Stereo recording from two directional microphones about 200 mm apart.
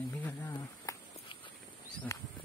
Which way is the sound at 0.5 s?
20° left (ahead or behind).